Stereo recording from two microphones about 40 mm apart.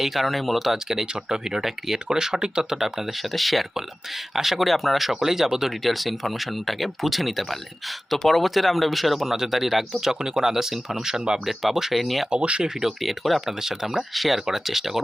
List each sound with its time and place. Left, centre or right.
0.0 s speech: centre
12.3 s speech: right
13.0 s speech: centre
13.5 s speech: centre